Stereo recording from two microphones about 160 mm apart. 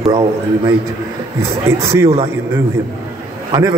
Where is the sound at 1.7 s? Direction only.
15° right (ahead or behind).